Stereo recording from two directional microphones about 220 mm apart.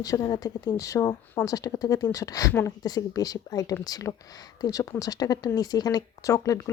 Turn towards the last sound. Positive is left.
turn(degrees=15)  # may be behind; listen again after turning